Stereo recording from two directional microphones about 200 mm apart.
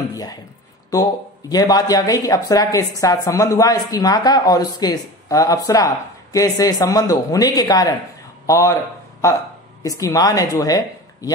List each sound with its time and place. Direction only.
0.1 s a sound: 20° left (ahead or behind)
0.9 s a woman's voice: 20° left (ahead or behind)
9.8 s a woman's voice: 15° left (ahead or behind)